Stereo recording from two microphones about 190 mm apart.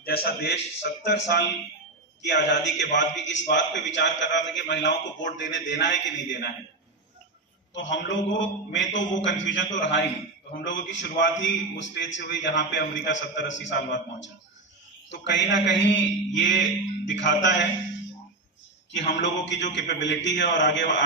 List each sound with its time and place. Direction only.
0.0 s a man's voice: 55° left (ahead or behind); by 6.5 s 70° left (ahead or behind)
7.7 s a man's voice: 70° left (ahead or behind)
18.9 s a man's voice: 70° left (ahead or behind)